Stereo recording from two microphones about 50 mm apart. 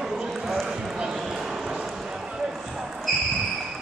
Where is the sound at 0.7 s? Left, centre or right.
Centre.